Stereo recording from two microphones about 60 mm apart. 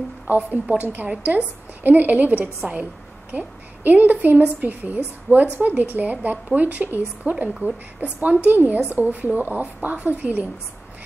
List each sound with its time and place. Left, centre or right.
0.4 s a woman's voice: right